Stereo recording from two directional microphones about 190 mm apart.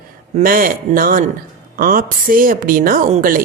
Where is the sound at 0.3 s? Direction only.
45° right (ahead or behind).